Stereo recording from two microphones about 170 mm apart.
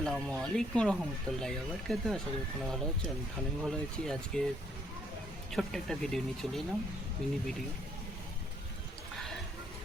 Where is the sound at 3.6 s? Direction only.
Centre (ahead or behind).